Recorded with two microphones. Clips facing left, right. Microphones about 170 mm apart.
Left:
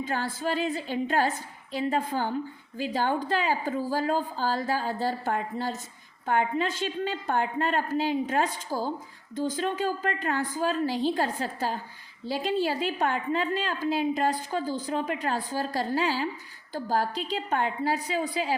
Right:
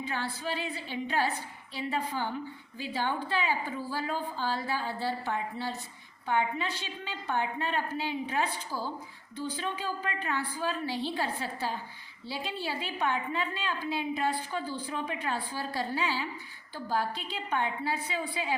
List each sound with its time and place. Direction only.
0.0 s a woman's voice: 45° left (ahead or behind)